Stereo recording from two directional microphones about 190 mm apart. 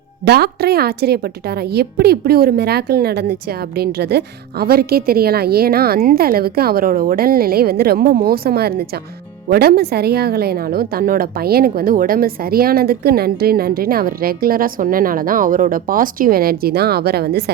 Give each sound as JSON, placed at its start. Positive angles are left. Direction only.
{"t": 0.3, "sound": "a woman's voice", "side_deg": -55}